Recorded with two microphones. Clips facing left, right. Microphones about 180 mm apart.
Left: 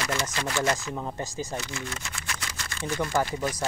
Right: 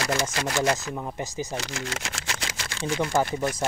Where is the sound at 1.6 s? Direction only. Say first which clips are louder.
Right 3 dB; 90° right.